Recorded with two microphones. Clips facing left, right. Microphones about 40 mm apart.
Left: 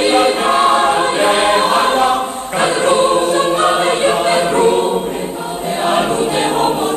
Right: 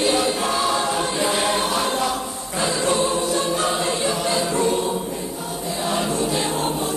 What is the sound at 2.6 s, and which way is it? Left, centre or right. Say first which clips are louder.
Choir: left 8 dB; left.